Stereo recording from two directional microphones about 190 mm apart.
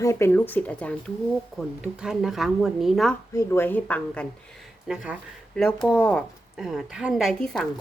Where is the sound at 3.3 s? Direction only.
10° left (ahead or behind).